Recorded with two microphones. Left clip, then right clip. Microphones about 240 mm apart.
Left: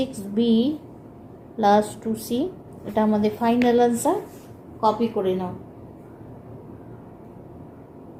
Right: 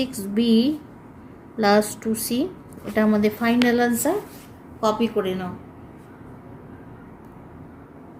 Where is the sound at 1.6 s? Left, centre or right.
Right.